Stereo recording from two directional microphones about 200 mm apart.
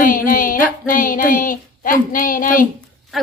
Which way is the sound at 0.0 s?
45° left (ahead or behind).